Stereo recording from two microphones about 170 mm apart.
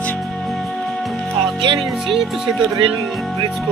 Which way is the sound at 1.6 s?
30° right (ahead or behind).